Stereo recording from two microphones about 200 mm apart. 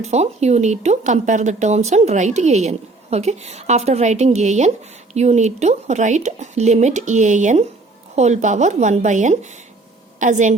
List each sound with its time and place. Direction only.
0.0 s speech: 35° right (ahead or behind)